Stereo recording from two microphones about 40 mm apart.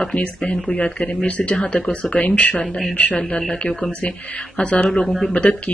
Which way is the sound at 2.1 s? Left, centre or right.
Left.